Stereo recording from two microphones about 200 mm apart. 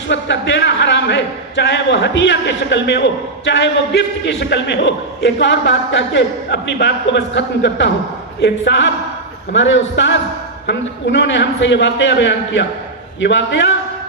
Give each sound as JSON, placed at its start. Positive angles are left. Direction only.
{"t": 0.1, "sound": "a man's voice", "side_deg": 65}